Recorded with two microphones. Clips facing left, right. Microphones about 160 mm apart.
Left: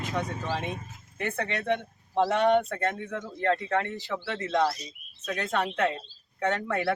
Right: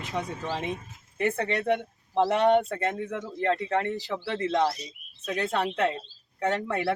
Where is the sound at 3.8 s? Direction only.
30° right (ahead or behind).